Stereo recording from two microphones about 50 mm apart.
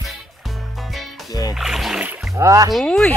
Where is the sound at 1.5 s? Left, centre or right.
Centre.